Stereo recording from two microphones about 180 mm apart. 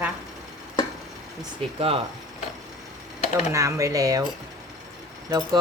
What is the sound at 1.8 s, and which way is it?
Speech, 30° right (ahead or behind).